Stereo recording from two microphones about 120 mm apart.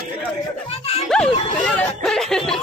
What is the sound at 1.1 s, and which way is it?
Speech, 5° left (ahead or behind).